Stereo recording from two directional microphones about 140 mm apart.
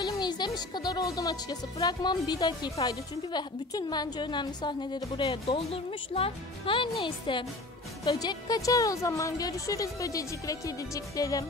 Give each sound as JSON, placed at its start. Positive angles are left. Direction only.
{"t": 0.0, "sound": "speech", "side_deg": 30}